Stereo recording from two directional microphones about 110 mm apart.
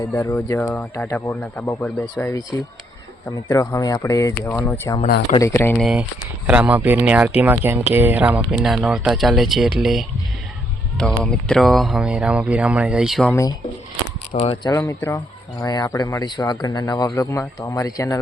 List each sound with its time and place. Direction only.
0.1 s speech: 20° left (ahead or behind)
3.2 s speech: 30° left (ahead or behind)
4.5 s speech: 15° left (ahead or behind)
5.7 s speech: centre (ahead or behind)
6.5 s speech: 15° right (ahead or behind)
14.3 s speech: 80° left
14.6 s speech: 30° left (ahead or behind)
15.6 s speech: 35° left (ahead or behind)